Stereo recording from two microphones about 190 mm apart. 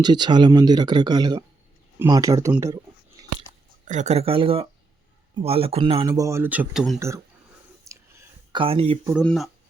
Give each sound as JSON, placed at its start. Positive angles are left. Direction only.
{"t": 0.0, "sound": "speech", "side_deg": -20}
{"t": 3.8, "sound": "speech", "side_deg": -40}
{"t": 6.1, "sound": "speech", "side_deg": -15}
{"t": 7.9, "sound": "a sound", "side_deg": -15}
{"t": 8.5, "sound": "speech", "side_deg": -30}
{"t": 9.2, "sound": "speech", "side_deg": 0}